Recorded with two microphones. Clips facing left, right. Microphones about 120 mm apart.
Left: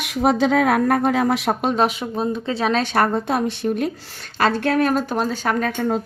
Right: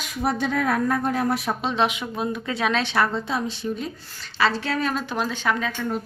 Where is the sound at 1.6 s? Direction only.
45° left (ahead or behind).